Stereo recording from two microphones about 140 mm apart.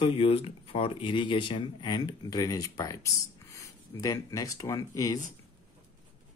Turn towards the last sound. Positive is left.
turn(degrees=25)  # may be behind; listen again after turning